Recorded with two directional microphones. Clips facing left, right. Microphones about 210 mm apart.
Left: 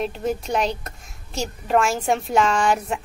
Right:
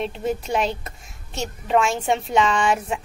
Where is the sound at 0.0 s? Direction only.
Centre (ahead or behind).